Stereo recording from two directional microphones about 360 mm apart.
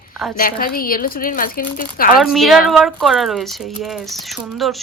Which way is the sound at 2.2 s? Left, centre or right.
Centre.